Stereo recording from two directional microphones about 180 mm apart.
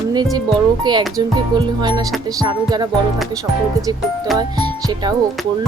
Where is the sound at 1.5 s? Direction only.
25° right (ahead or behind).